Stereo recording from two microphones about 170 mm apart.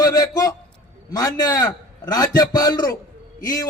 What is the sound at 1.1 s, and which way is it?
A man's voice, 20° left (ahead or behind).